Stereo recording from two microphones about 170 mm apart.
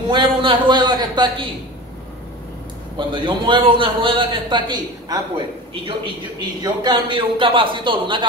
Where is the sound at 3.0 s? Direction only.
30° right (ahead or behind).